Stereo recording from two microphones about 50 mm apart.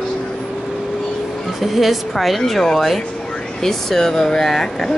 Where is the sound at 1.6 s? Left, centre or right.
Centre.